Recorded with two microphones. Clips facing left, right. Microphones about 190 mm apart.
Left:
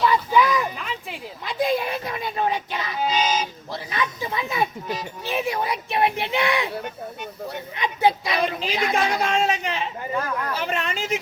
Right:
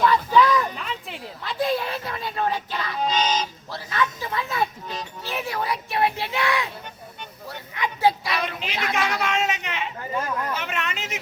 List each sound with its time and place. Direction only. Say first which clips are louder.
0.0 s a sound: right 1 dB; 10° left (ahead or behind)
1.5 s a child's voice: left 2 dB; 15° left (ahead or behind)
3.0 s a child's voice: left 1 dB; 5° left (ahead or behind)
3.7 s a child's voice: right 1 dB; 20° left (ahead or behind)
7.8 s a woman's voice: left 1 dB; 20° left (ahead or behind)
8.4 s speech: left 5 dB; 35° left (ahead or behind)